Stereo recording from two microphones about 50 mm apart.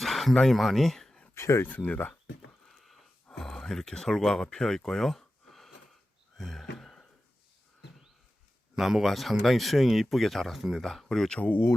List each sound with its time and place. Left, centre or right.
0.0 s a sound: centre
0.3 s speech: centre
1.4 s speech: left
1.6 s speech: left
2.6 s a sound: centre
3.3 s speech: centre
6.3 s a sound: centre
8.7 s speech: centre
10.8 s speech: centre